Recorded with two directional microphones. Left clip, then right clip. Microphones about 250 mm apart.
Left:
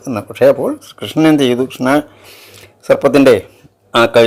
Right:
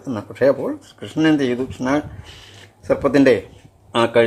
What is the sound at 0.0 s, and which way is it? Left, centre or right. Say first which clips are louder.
Speech: left 7 dB; centre.